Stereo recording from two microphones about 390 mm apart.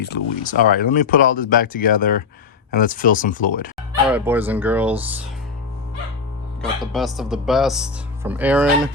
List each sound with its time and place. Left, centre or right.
0.0 s speech: left
4.0 s speech: centre
6.6 s speech: centre